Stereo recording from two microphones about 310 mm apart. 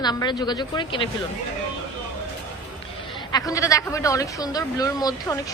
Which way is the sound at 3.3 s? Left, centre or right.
Centre.